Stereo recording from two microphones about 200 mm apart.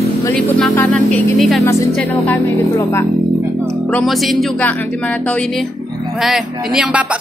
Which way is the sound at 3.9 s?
Centre (ahead or behind).